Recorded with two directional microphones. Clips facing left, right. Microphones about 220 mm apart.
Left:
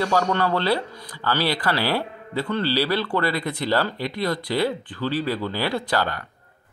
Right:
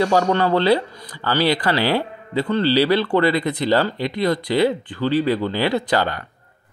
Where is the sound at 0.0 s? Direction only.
20° right (ahead or behind).